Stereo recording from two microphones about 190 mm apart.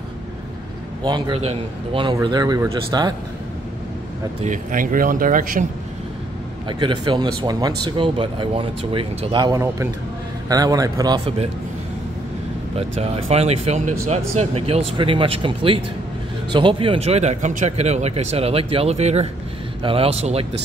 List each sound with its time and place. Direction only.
1.0 s speech: 20° right (ahead or behind)
4.5 s speech: 45° right (ahead or behind)
6.7 s speech: 25° right (ahead or behind)
12.7 s speech: 35° right (ahead or behind)